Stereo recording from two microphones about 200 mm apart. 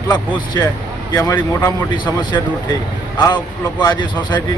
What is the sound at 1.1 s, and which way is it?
A man's voice, 20° left (ahead or behind).